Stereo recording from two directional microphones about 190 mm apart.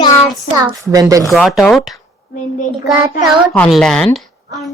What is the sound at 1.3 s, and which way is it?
Speech, centre (ahead or behind).